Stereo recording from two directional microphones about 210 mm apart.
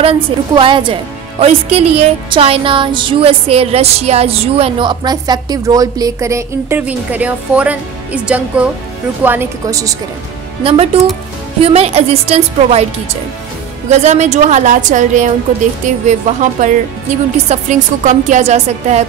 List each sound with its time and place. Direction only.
0.0 s speech: 25° right (ahead or behind)
10.6 s speech: 25° right (ahead or behind)
13.8 s a woman's voice: 35° right (ahead or behind)